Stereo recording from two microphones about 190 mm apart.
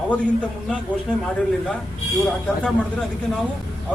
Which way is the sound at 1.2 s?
5° left (ahead or behind).